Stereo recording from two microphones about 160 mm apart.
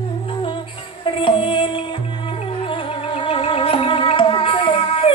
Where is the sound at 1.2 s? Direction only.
30° left (ahead or behind).